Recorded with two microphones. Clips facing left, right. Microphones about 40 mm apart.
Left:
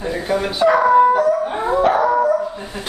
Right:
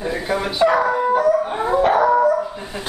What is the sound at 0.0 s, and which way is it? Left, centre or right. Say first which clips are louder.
Speech: left 2 dB; centre.